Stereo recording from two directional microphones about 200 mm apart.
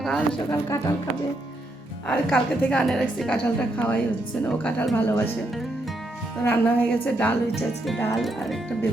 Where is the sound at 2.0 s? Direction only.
5° left (ahead or behind).